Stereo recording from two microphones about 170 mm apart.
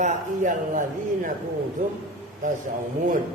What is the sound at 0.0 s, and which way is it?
A man's voice, 45° right (ahead or behind).